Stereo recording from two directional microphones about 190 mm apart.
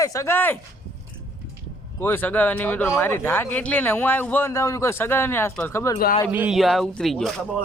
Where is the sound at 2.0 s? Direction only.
10° left (ahead or behind).